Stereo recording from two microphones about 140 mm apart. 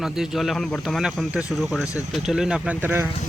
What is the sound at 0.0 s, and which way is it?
Speech, 5° right (ahead or behind).